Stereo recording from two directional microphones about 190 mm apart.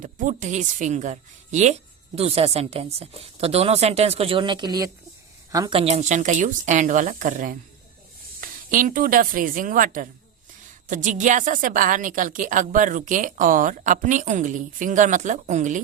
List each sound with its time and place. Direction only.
0.0 s a woman's voice: 40° right (ahead or behind); by 5.8 s 20° right (ahead or behind)
5.8 s a woman's voice: 35° right (ahead or behind)